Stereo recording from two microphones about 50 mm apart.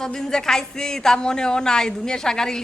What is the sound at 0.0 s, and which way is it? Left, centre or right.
Speech, centre.